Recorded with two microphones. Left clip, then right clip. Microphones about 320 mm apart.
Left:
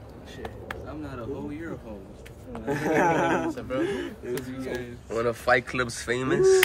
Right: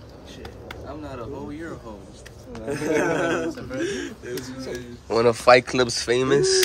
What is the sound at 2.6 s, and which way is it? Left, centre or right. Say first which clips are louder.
A man's voice: even; left.